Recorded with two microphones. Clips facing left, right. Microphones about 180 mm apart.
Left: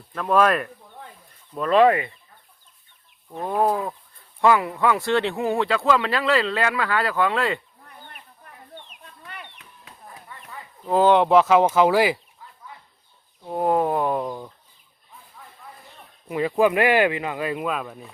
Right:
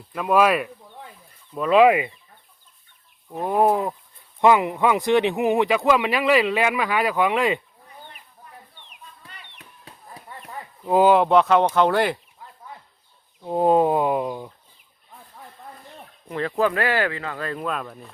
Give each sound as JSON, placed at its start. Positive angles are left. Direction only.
{"t": 0.1, "sound": "speech", "side_deg": -10}
{"t": 3.2, "sound": "chicken", "side_deg": -15}
{"t": 4.4, "sound": "speech", "side_deg": -20}
{"t": 9.2, "sound": "chicken", "side_deg": 60}
{"t": 9.6, "sound": "chop", "side_deg": -35}
{"t": 10.8, "sound": "speech", "side_deg": -15}
{"t": 11.1, "sound": "speech", "side_deg": 0}
{"t": 13.4, "sound": "speech", "side_deg": -20}
{"t": 16.3, "sound": "speech", "side_deg": 10}